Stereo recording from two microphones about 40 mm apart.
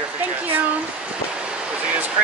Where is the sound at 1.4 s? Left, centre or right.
Right.